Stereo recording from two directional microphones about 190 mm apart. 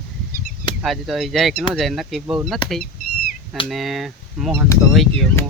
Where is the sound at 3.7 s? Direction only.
Centre (ahead or behind).